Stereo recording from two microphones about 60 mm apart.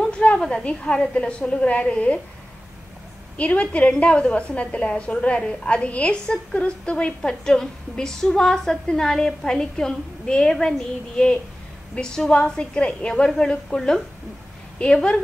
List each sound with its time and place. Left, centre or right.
0.2 s a woman's voice: centre
3.3 s a woman's voice: left